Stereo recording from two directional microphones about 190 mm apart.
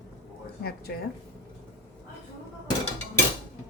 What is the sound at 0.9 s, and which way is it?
Speech, 55° left (ahead or behind).